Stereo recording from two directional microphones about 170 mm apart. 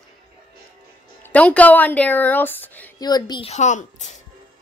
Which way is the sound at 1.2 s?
10° left (ahead or behind).